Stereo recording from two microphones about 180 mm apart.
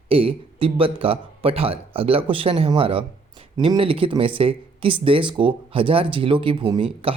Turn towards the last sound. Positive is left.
turn(degrees=-30)  # may be behind; listen again after turning